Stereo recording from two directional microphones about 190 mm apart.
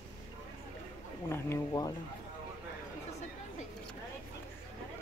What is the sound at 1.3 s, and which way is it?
Speech, 15° left (ahead or behind).